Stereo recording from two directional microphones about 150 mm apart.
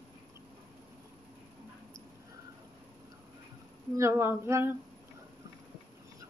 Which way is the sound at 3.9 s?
20° right (ahead or behind).